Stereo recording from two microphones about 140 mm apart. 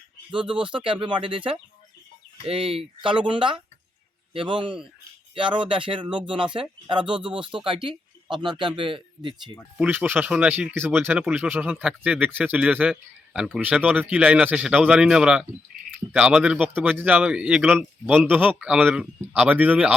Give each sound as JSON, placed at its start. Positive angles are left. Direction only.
{"t": 0.6, "sound": "speech", "side_deg": -35}
{"t": 9.7, "sound": "speech", "side_deg": -10}